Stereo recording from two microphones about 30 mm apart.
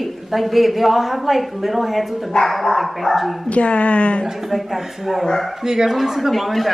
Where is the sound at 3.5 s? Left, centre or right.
Left.